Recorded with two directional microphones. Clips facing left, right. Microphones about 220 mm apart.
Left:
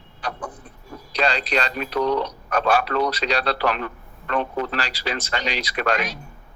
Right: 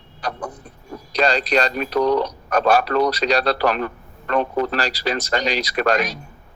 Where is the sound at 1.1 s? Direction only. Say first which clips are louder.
Right 4 dB; 40° right (ahead or behind).